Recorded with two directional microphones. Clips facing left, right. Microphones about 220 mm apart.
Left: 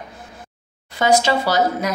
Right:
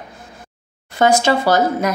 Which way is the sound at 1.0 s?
50° right (ahead or behind).